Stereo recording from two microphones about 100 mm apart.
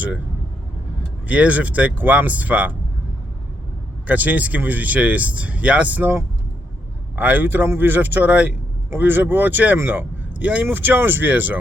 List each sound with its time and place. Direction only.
1.3 s speech: 15° right (ahead or behind)
4.0 s a man's voice: 15° right (ahead or behind)